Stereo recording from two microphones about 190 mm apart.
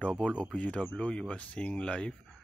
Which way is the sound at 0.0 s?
5° left (ahead or behind).